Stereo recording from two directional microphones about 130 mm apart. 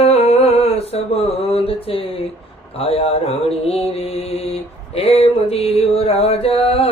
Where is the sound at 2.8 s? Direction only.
50° left (ahead or behind).